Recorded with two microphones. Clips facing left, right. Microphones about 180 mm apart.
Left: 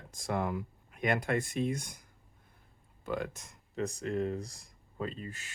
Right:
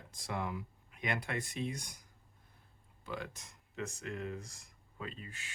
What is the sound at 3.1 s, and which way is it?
Speech, 50° left (ahead or behind).